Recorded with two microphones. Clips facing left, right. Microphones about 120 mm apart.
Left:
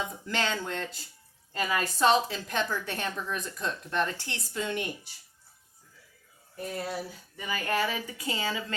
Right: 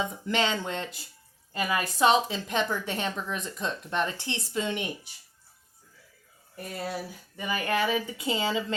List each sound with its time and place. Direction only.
0.3 s a woman's voice: 20° right (ahead or behind)
6.7 s a woman's voice: 15° right (ahead or behind)